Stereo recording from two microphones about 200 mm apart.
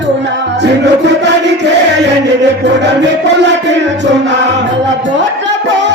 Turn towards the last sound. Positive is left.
turn(degrees=-60)  # may be behind; listen again after turning